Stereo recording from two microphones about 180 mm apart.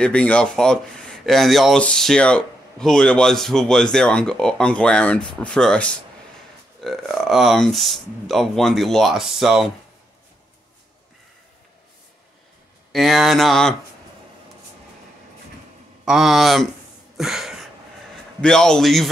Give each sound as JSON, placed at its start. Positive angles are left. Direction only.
{"t": 0.0, "sound": "speech", "side_deg": 5}
{"t": 12.9, "sound": "speech", "side_deg": 0}
{"t": 16.1, "sound": "speech", "side_deg": 0}
{"t": 17.2, "sound": "a sound", "side_deg": 0}
{"t": 18.4, "sound": "speech", "side_deg": 5}